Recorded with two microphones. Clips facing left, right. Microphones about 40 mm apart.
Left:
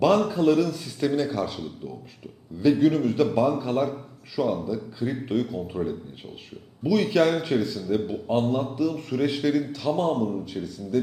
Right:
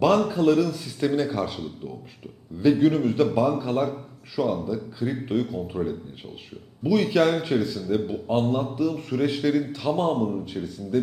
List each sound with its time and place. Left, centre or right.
0.3 s speech: centre
1.3 s a man's voice: right
2.7 s speech: centre
9.6 s a man's voice: right